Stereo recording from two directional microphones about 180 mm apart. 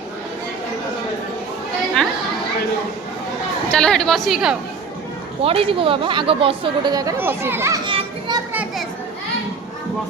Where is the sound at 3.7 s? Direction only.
5° left (ahead or behind).